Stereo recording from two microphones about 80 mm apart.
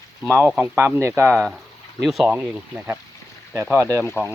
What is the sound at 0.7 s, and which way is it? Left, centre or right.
Speech, right.